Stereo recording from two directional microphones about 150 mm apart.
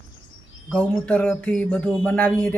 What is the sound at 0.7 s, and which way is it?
Speech, 10° left (ahead or behind).